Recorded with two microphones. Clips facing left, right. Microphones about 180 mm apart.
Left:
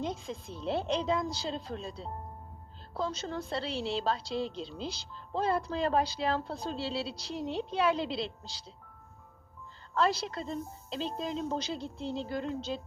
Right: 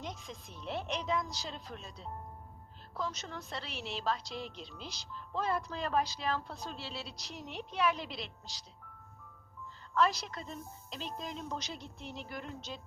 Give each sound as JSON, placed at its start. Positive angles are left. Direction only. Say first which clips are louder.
{"t": 0.0, "sound": "a woman's voice", "louder": "left 8 dB", "side_deg": 30}
{"t": 9.9, "sound": "a woman's voice", "louder": "left 2 dB", "side_deg": 30}